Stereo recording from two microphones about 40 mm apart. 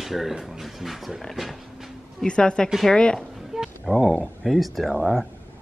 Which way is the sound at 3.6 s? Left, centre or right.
Centre.